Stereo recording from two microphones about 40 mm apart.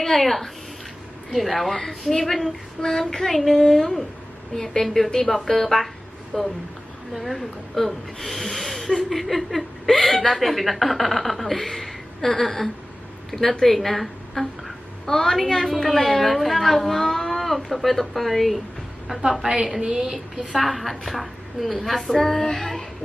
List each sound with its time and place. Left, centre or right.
0.0 s a woman's voice: centre
7.2 s a woman's voice: centre
19.6 s a woman's voice: centre